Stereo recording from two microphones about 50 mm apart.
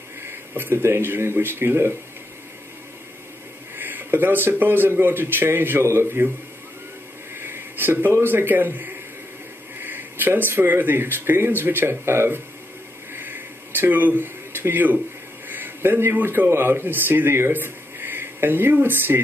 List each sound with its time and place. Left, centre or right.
0.2 s a sound: right
0.9 s speech: right
3.7 s speech: right
7.3 s a man's voice: right
13.1 s a sound: right
15.4 s a man's voice: right